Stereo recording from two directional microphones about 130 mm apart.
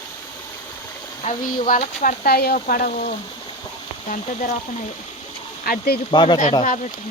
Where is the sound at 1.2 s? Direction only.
85° left.